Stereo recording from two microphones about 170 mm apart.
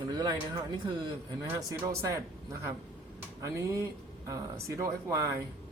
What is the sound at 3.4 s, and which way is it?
Speech, 15° right (ahead or behind).